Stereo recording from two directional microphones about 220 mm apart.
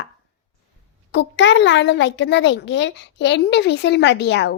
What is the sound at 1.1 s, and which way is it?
A child's voice, 55° left (ahead or behind).